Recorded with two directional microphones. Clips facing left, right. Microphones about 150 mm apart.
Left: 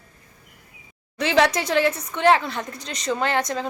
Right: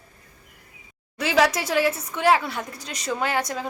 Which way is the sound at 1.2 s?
5° right (ahead or behind).